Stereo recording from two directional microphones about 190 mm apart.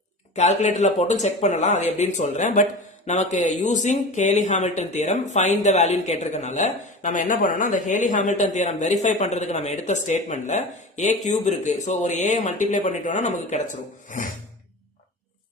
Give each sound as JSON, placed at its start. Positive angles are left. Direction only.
{"t": 0.3, "sound": "speech", "side_deg": 35}